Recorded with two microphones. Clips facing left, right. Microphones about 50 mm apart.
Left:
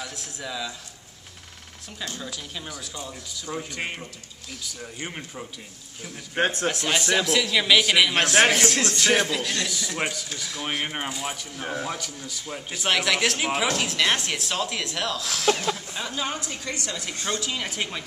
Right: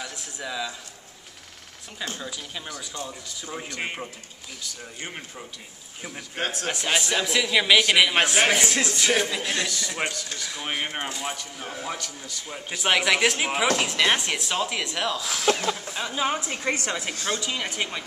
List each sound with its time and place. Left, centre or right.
0.0 s speech: centre
2.1 s speech: centre
2.7 s a man's voice: centre
5.0 s a man's voice: centre
6.4 s speech: left
6.7 s a man's voice: centre
9.4 s a woman's voice: right
9.7 s a man's voice: centre
16.4 s a woman's voice: right
17.3 s a man's voice: centre